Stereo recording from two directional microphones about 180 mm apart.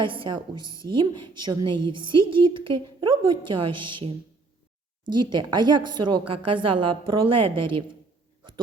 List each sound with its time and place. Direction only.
0.0 s a woman's voice: 30° right (ahead or behind)